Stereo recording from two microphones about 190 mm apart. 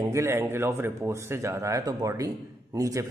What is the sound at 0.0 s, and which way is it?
Speech, 15° right (ahead or behind).